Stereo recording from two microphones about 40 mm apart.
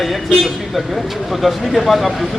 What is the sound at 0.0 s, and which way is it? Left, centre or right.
Speech, centre.